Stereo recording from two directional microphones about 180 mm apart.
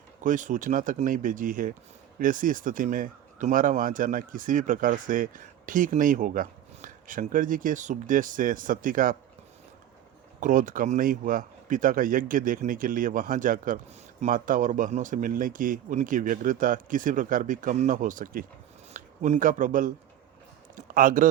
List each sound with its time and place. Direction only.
0.2 s speech: 45° right (ahead or behind)
10.4 s speech: 50° right (ahead or behind)